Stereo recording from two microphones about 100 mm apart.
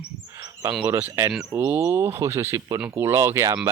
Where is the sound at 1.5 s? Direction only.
20° right (ahead or behind); by 2.8 s 40° right (ahead or behind).